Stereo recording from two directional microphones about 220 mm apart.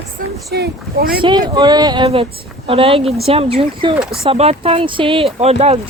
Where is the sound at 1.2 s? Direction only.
20° right (ahead or behind).